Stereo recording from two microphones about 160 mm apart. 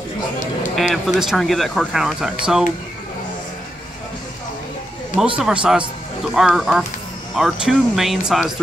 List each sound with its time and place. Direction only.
0.7 s speech: centre (ahead or behind)
5.4 s speech: 5° right (ahead or behind)